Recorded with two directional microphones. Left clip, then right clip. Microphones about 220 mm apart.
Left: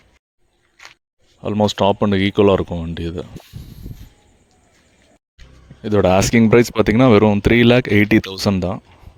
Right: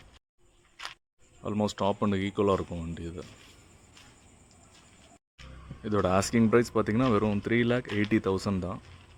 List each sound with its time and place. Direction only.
1.4 s speech: 35° left (ahead or behind)
5.4 s speech: 30° left (ahead or behind)